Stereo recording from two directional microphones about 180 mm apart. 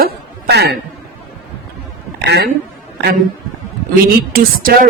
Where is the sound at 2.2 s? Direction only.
65° right (ahead or behind).